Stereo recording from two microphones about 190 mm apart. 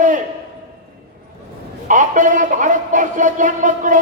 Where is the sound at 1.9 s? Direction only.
40° right (ahead or behind).